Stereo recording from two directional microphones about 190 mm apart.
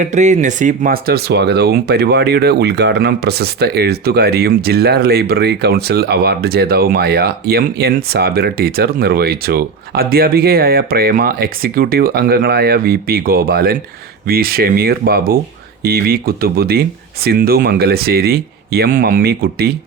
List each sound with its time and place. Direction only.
0.0 s speech: 40° right (ahead or behind); by 19.7 s 55° right (ahead or behind)